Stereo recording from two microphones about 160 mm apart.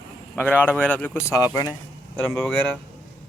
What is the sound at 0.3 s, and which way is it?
Speech, 10° left (ahead or behind).